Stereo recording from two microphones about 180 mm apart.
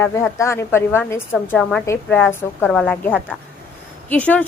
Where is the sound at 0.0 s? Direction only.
15° left (ahead or behind).